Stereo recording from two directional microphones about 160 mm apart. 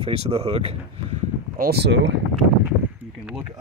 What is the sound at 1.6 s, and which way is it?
Speech, 85° right.